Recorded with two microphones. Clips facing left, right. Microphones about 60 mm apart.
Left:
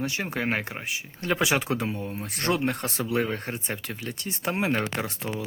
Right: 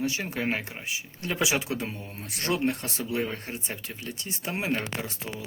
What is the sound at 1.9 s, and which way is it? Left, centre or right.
Speech, left.